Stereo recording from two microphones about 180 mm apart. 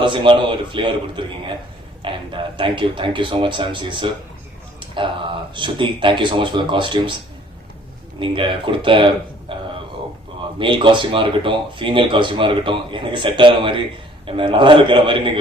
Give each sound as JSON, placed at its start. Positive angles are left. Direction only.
{"t": 0.0, "sound": "speech", "side_deg": -25}
{"t": 8.2, "sound": "speech", "side_deg": -30}
{"t": 10.6, "sound": "speech", "side_deg": -25}